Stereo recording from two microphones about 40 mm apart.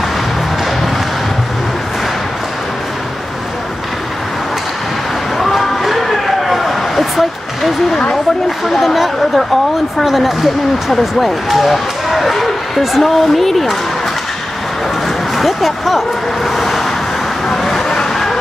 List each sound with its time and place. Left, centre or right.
5.4 s a sound: centre
8.6 s speech: centre
15.3 s speech: centre
16.4 s vehicle: centre